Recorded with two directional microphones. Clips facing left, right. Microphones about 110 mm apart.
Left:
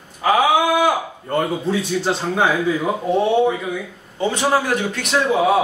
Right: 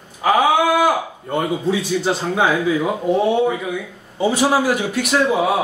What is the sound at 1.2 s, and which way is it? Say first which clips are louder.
A man's voice: even; centre (ahead or behind).